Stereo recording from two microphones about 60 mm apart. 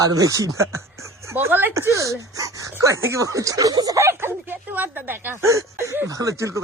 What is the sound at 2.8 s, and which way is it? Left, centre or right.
Speech, right.